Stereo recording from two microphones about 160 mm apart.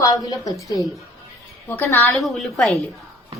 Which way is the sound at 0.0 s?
20° left (ahead or behind).